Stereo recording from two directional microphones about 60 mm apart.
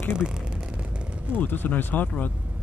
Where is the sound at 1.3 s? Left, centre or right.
Left.